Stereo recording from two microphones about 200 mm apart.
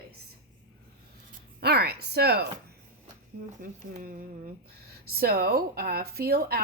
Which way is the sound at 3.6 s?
40° right (ahead or behind).